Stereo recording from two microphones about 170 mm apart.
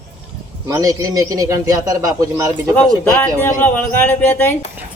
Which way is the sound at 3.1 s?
10° left (ahead or behind).